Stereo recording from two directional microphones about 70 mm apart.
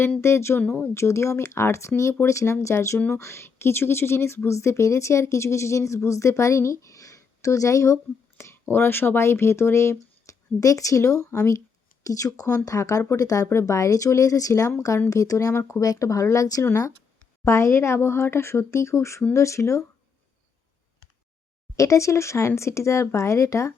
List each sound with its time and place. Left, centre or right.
0.2 s a woman's voice: left
8.7 s speech: left
10.6 s a woman's voice: left
12.0 s speech: left
13.5 s a woman's voice: left
17.4 s a woman's voice: left
21.8 s a woman's voice: left